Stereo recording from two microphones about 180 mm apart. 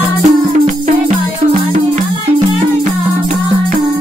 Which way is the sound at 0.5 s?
45° right (ahead or behind).